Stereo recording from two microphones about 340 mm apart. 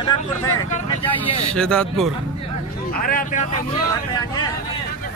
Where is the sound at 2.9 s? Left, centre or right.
Left.